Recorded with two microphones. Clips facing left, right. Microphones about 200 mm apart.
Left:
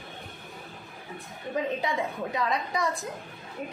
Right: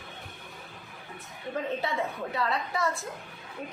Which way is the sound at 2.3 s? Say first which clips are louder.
Left 1 dB; 15° left (ahead or behind).